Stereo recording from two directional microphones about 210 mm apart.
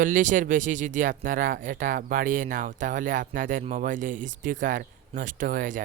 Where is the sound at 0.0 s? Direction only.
40° right (ahead or behind).